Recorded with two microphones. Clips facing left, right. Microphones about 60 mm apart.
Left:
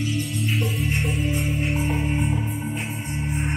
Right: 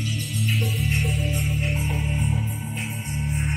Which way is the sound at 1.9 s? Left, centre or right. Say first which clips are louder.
Left 3 dB; left.